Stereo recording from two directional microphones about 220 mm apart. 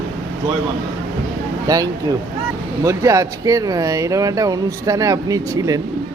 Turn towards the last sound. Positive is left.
turn(degrees=-15)  # may be behind; listen again after turning